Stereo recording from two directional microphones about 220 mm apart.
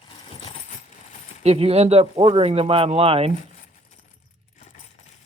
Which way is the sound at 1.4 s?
30° right (ahead or behind).